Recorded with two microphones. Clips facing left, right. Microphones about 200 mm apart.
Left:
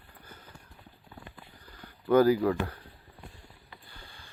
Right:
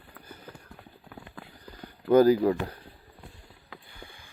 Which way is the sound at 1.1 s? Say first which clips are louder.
Right 4 dB; 90° right.